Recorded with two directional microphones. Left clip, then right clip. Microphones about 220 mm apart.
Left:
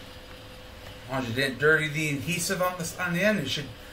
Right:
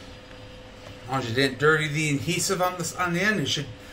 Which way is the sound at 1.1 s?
40° right (ahead or behind).